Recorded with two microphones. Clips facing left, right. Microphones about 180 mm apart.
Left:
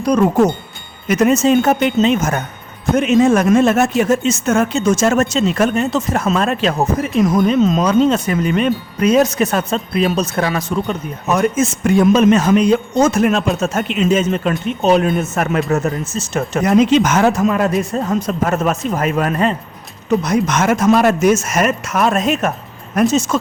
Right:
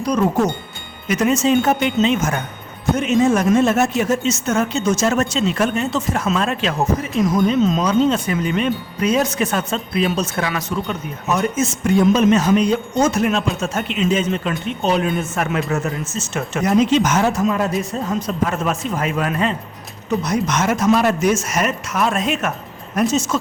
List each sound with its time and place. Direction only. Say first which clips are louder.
1.0 s speech: left 4 dB; 45° left (ahead or behind)
3.0 s a man's voice: left 4 dB; 75° left (ahead or behind)
3.8 s speech: left 3 dB; 50° left (ahead or behind)
11.3 s speech: left 5 dB; 50° left (ahead or behind)
16.6 s speech: left 3 dB; 70° left (ahead or behind)
18.4 s speech: left 5 dB; 45° left (ahead or behind)
23.0 s speech: left 4 dB; 60° left (ahead or behind)